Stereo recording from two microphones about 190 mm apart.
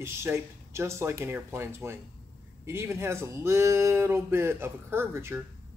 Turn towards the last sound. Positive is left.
turn(degrees=-10)  # may be behind; listen again after turning